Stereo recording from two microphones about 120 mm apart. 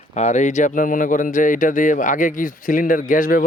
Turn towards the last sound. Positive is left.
turn(degrees=90)